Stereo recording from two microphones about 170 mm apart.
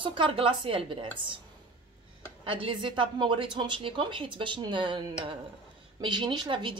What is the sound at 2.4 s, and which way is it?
A woman's voice, 30° right (ahead or behind).